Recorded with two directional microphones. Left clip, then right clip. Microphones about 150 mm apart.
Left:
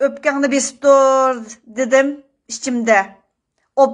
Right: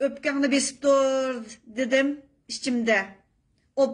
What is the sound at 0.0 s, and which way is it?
A woman's voice, 5° right (ahead or behind).